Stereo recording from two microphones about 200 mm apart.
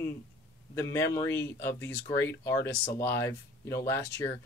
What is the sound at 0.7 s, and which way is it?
Speech, 15° left (ahead or behind).